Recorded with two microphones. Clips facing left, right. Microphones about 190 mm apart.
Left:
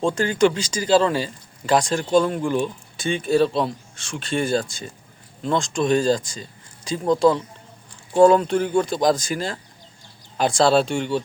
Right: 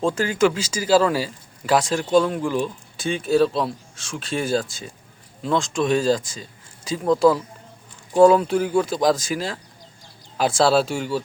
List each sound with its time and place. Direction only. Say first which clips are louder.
0.0 s speech: left 1 dB; 5° right (ahead or behind)